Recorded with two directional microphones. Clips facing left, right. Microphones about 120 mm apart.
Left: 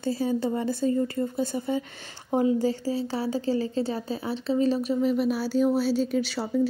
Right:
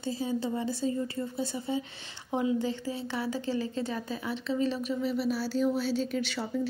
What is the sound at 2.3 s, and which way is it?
Speech, 40° left (ahead or behind).